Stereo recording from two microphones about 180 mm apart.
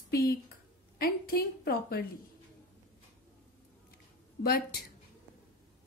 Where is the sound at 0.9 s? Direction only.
55° left (ahead or behind).